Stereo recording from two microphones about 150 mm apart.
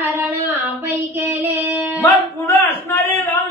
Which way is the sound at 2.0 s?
15° left (ahead or behind).